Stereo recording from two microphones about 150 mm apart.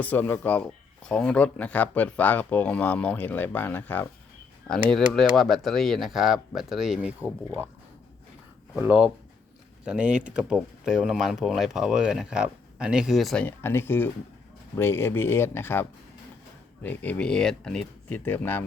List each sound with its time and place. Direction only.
0.0 s speech: 10° left (ahead or behind); by 7.3 s 5° right (ahead or behind)
8.8 s speech: 10° right (ahead or behind)
13.4 s speech: 15° left (ahead or behind)